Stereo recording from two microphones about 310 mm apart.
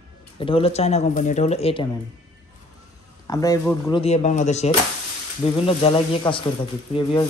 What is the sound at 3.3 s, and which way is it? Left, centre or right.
Speech, centre.